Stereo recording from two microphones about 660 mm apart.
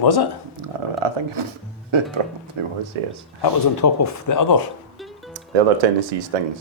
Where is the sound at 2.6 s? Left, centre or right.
Right.